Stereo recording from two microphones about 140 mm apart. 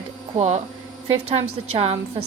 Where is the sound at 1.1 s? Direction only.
45° right (ahead or behind).